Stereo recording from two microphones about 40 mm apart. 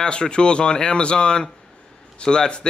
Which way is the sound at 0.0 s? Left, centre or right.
Left.